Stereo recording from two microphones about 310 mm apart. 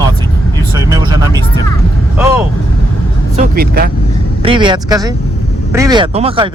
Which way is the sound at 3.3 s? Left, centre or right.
Right.